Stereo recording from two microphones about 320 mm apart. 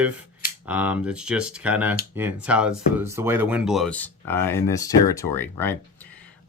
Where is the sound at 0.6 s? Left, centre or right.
Centre.